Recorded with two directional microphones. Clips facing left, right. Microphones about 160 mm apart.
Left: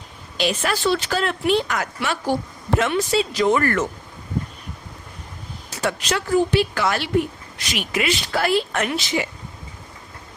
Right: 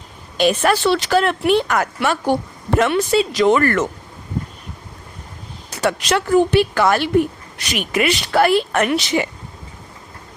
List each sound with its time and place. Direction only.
0.3 s speech: 55° right (ahead or behind); by 3.8 s 70° right (ahead or behind)
5.8 s speech: 65° right (ahead or behind)